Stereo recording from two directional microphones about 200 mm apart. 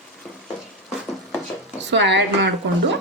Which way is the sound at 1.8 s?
60° right (ahead or behind).